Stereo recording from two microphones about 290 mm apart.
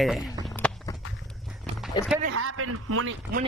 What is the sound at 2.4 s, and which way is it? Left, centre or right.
Speech, right.